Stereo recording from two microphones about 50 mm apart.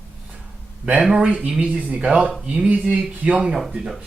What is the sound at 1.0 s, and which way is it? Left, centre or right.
Speech, centre.